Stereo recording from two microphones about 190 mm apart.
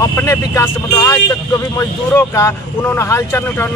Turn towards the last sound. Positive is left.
turn(degrees=15)  # may be behind; listen again after turning